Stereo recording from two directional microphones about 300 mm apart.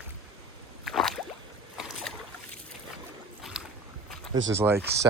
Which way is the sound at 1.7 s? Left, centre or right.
Centre.